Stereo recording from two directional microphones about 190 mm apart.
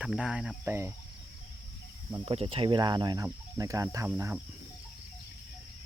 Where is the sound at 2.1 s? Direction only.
30° right (ahead or behind); by 4.4 s 10° right (ahead or behind).